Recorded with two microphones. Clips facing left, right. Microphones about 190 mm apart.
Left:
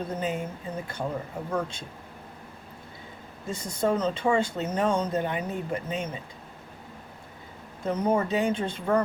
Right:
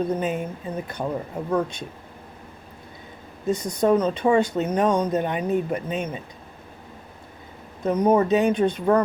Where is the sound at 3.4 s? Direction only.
20° right (ahead or behind).